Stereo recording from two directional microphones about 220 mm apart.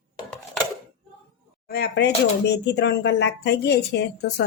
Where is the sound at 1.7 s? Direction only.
45° left (ahead or behind).